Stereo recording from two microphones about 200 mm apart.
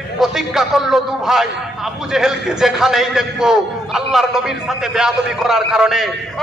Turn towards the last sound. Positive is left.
turn(degrees=0)  # may be behind; listen again after turning